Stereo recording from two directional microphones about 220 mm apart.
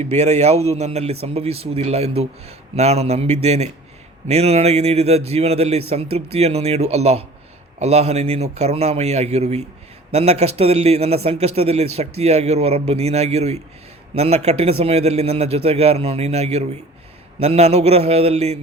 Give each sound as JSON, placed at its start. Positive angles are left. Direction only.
{"t": 0.0, "sound": "speech", "side_deg": -30}